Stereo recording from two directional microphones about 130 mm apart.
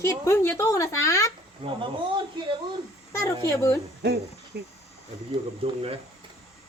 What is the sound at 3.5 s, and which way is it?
Speech, 25° left (ahead or behind).